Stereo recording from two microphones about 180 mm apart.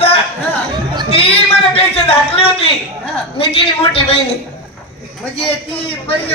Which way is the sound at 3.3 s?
30° left (ahead or behind).